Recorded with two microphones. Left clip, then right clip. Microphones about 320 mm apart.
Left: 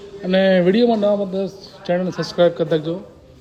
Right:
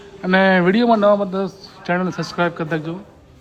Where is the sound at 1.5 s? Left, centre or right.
Centre.